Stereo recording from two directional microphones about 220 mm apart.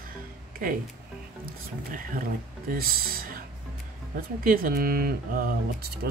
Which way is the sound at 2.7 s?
40° right (ahead or behind).